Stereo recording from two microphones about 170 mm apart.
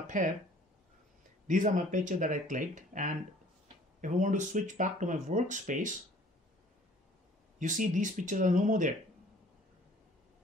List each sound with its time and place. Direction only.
0.0 s speech: 50° right (ahead or behind)
1.5 s speech: 50° right (ahead or behind)
7.5 s speech: 50° right (ahead or behind)